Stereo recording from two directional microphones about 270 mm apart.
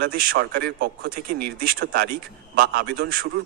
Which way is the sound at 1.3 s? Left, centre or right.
Right.